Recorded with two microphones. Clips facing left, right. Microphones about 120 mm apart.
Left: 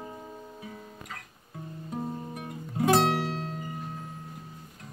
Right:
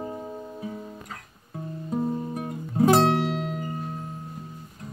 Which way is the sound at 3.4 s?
90° right.